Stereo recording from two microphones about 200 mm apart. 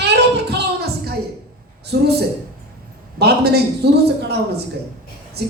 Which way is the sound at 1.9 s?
55° right (ahead or behind).